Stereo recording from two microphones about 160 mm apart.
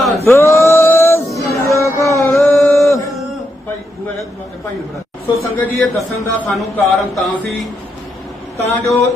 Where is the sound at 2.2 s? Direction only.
15° left (ahead or behind).